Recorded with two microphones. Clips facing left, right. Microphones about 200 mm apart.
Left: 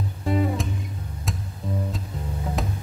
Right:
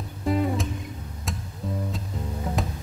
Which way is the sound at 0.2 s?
Centre (ahead or behind).